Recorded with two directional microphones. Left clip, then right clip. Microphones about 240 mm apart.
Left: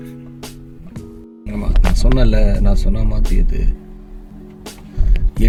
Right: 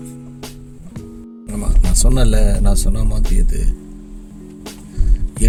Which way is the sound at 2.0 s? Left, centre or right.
Centre.